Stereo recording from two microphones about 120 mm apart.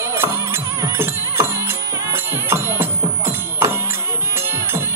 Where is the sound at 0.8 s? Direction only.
20° right (ahead or behind).